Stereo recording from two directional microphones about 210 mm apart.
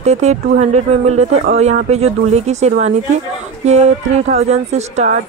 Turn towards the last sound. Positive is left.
turn(degrees=-30)  # may be behind; listen again after turning